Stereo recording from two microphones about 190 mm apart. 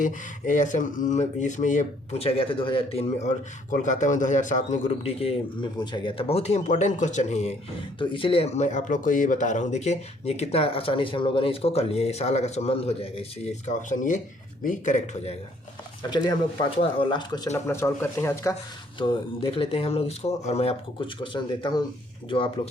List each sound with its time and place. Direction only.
0.0 s speech: 40° left (ahead or behind)
16.0 s speech: 25° left (ahead or behind)
18.9 s speech: 25° left (ahead or behind)